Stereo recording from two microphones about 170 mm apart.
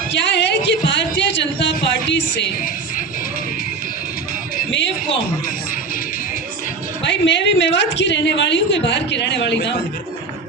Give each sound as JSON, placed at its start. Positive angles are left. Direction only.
{"t": 0.1, "sound": "a sound", "side_deg": 90}
{"t": 2.0, "sound": "a woman's voice", "side_deg": 90}
{"t": 4.7, "sound": "a man's voice", "side_deg": 90}
{"t": 7.0, "sound": "a woman's voice", "side_deg": 90}